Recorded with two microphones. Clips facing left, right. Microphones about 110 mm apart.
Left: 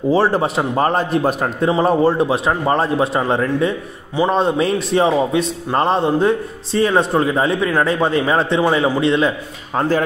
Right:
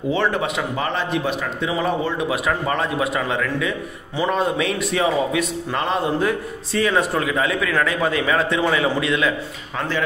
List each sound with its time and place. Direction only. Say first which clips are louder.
0.1 s a man's voice: left 6 dB; 35° left (ahead or behind)
9.8 s speech: left 7 dB; 40° left (ahead or behind)